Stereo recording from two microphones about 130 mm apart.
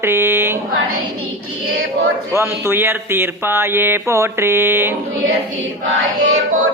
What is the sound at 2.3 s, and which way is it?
Speech, 20° right (ahead or behind).